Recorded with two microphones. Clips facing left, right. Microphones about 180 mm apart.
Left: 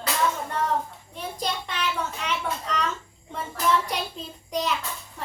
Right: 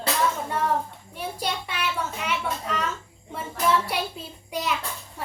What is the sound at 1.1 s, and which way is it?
A child's voice, 10° right (ahead or behind).